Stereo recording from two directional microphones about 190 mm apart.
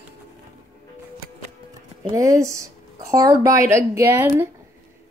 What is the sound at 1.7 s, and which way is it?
Speech, 20° right (ahead or behind).